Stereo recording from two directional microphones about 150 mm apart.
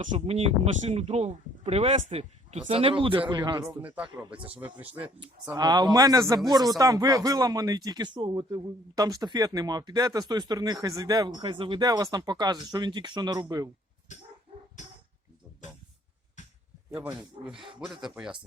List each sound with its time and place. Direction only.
0.0 s speech: 45° right (ahead or behind); by 3.8 s 25° right (ahead or behind)
3.8 s speech: 10° right (ahead or behind)
5.5 s speech: 25° right (ahead or behind)
16.9 s speech: 15° right (ahead or behind)